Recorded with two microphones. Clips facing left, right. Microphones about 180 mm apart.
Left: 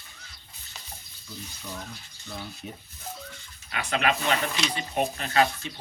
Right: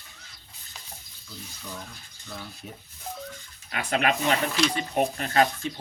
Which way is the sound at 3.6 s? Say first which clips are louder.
Right 1 dB; 45° right (ahead or behind).